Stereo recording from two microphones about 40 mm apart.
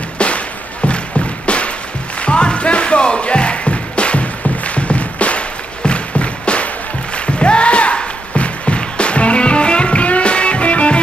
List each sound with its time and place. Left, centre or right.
0.2 s music: left